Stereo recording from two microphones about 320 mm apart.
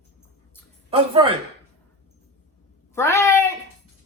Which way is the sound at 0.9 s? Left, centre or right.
Centre.